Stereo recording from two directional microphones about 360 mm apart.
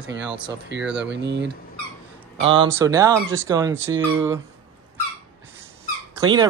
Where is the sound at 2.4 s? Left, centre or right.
Centre.